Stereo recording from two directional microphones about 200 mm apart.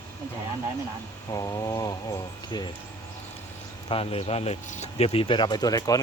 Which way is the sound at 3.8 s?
25° left (ahead or behind).